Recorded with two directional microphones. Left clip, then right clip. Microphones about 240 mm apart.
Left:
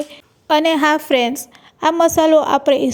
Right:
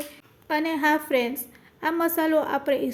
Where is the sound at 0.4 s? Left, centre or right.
Left.